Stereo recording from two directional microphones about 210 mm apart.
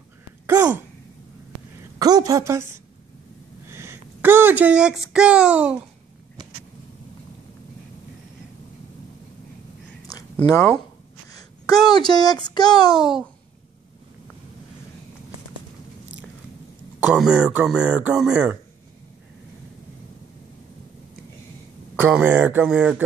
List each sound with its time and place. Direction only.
0.5 s gasp: 15° right (ahead or behind)
2.0 s a woman's voice: 20° right (ahead or behind)
3.6 s a sound: 10° right (ahead or behind)
10.3 s speech: 15° left (ahead or behind)
17.0 s speech: 5° right (ahead or behind)
21.9 s speech: 10° right (ahead or behind)